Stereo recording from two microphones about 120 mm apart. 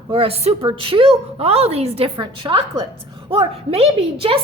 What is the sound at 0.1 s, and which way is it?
A woman's voice, 55° right (ahead or behind).